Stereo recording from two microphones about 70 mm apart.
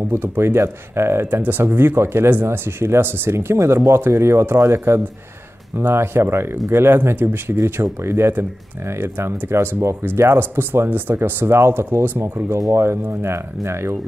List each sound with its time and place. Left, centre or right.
0.1 s speech: right
1.4 s speech: right
12.5 s speech: right
12.8 s speech: right